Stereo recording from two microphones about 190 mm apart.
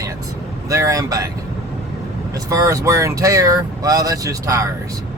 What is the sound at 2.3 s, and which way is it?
Speech, 15° right (ahead or behind).